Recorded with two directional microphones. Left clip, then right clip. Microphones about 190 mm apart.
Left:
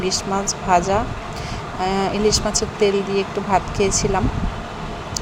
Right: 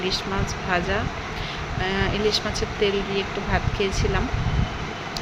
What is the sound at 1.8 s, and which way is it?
Speech, 20° left (ahead or behind).